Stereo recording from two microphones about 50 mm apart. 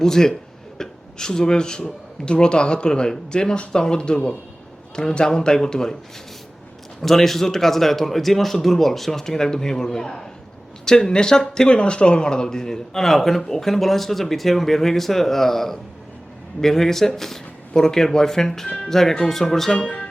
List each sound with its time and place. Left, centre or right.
0.0 s speech: centre
7.0 s speech: centre